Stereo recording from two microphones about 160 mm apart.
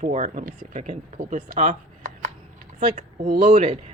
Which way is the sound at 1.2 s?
55° right (ahead or behind).